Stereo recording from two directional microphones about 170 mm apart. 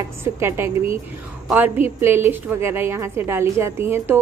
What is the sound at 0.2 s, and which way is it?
A woman's voice, 15° right (ahead or behind).